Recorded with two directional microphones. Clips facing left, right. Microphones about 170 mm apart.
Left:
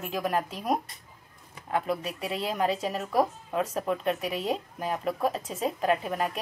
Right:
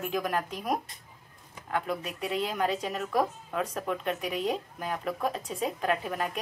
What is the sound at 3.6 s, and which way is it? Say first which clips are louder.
Speech: left 3 dB; centre (ahead or behind).